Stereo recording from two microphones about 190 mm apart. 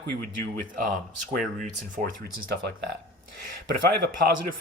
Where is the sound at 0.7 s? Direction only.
45° right (ahead or behind).